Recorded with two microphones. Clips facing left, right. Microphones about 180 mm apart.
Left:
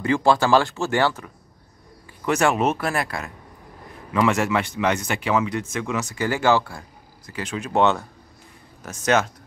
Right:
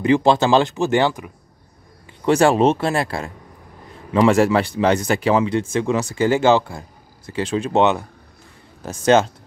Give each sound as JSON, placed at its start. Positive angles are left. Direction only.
{"t": 0.0, "sound": "speech", "side_deg": -20}
{"t": 2.2, "sound": "speech", "side_deg": -30}
{"t": 8.8, "sound": "speech", "side_deg": -30}